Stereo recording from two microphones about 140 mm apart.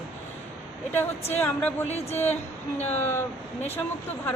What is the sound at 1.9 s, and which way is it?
Speech, 50° left (ahead or behind).